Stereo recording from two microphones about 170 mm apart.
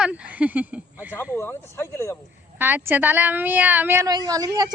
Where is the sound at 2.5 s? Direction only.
10° right (ahead or behind).